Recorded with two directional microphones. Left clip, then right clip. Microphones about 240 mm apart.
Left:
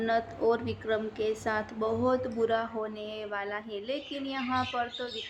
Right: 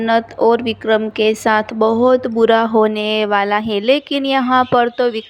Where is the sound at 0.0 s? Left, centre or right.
Right.